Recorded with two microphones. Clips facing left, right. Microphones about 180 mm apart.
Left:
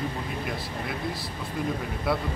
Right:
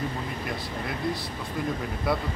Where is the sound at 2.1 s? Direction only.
Centre (ahead or behind).